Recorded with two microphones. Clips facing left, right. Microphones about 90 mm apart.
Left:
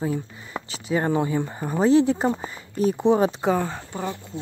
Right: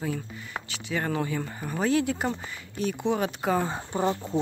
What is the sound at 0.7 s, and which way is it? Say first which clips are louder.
Speech: left 7 dB; 35° left (ahead or behind).